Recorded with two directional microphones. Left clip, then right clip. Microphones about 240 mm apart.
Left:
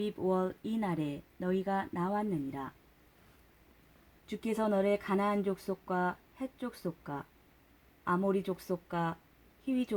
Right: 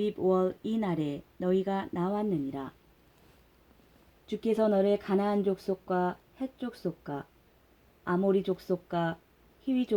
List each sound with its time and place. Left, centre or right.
0.0 s speech: left
4.3 s speech: left